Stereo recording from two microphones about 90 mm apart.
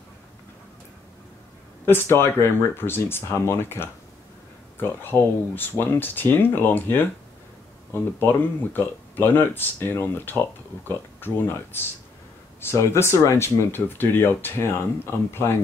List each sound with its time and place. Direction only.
1.9 s speech: 25° left (ahead or behind)
8.7 s speech: 20° left (ahead or behind)